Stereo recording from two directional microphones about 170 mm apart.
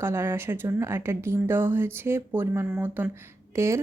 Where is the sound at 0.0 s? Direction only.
15° right (ahead or behind).